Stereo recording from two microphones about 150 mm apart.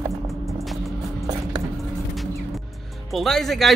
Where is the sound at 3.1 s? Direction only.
Centre (ahead or behind).